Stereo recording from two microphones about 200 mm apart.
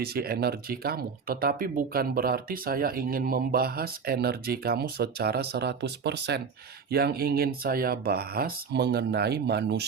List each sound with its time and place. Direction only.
0.0 s speech: 50° right (ahead or behind)